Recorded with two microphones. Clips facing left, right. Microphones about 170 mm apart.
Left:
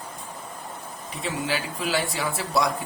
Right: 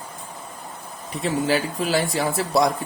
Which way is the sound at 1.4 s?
40° right (ahead or behind).